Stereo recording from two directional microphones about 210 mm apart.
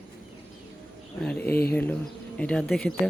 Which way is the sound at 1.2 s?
5° left (ahead or behind).